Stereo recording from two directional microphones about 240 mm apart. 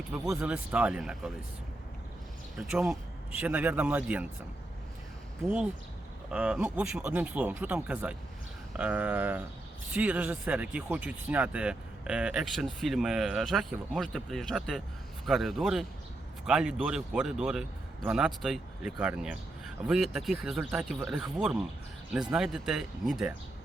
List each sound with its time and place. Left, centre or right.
0.1 s speech: centre
2.6 s speech: centre
5.5 s speech: centre